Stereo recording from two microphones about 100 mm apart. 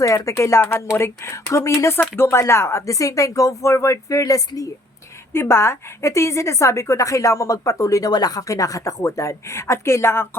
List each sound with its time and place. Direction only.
0.0 s speech: 35° left (ahead or behind)
5.3 s a woman's voice: 25° left (ahead or behind)